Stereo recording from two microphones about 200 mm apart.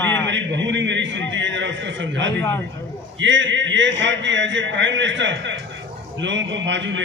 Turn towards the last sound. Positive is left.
turn(degrees=-65)  # may be behind; listen again after turning